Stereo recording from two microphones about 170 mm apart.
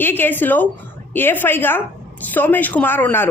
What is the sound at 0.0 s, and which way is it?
Speech, 10° left (ahead or behind).